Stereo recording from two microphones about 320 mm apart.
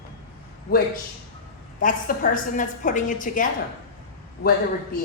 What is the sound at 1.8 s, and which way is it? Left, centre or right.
A woman's voice, left.